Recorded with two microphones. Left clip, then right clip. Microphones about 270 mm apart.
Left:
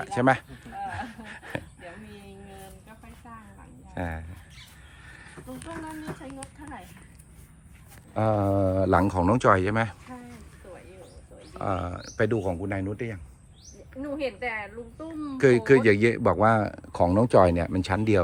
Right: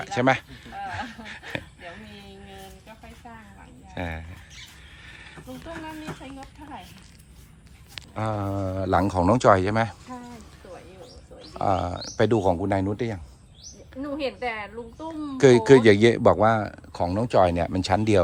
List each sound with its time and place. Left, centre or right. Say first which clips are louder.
0.0 s a sound: right 1 dB; centre
3.9 s speech: right 1 dB; centre
5.0 s a sound: right 3 dB; centre
6.4 s speech: right 1 dB; right
8.1 s speech: left 5 dB; centre
11.5 s speech: right 6 dB; centre
14.0 s a woman's voice: right 2 dB; right
15.4 s speech: right 4 dB; centre